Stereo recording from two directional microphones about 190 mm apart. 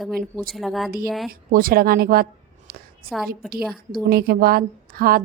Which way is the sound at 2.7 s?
50° right (ahead or behind).